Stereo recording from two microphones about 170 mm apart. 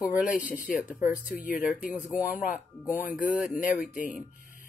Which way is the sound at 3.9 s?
50° left (ahead or behind).